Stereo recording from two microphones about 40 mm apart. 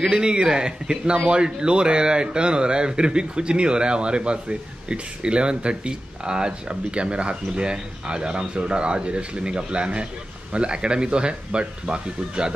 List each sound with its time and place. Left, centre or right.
0.1 s speech: right